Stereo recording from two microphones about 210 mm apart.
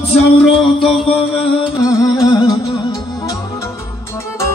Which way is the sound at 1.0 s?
25° left (ahead or behind).